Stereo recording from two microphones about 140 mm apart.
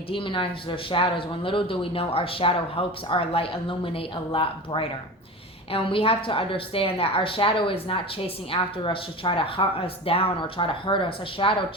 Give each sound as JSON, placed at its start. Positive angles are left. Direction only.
{"t": 0.1, "sound": "speech", "side_deg": 40}